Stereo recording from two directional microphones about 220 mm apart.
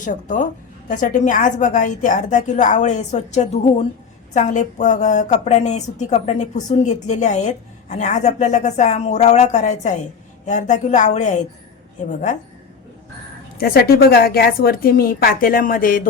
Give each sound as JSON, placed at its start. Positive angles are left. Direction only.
{"t": 0.0, "sound": "a woman's voice", "side_deg": 35}
{"t": 13.6, "sound": "a woman's voice", "side_deg": 45}